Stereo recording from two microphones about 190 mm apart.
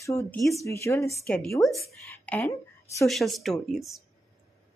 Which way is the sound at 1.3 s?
5° left (ahead or behind).